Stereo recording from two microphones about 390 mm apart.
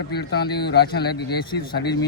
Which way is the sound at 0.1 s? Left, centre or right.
Left.